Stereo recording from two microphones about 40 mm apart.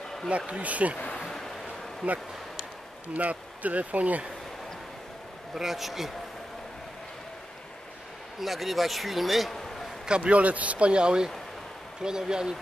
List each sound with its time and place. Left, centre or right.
0.5 s speech: right
0.9 s speech: left
2.0 s speech: right
5.5 s a man's voice: centre
8.4 s a man's voice: centre
10.2 s a man's voice: right; by 12.5 s centre